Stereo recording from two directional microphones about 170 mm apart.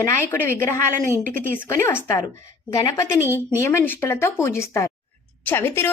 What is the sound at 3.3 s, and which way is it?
Speech, 15° left (ahead or behind).